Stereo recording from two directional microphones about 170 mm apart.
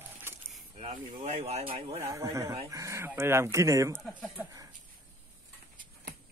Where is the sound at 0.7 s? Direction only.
40° right (ahead or behind).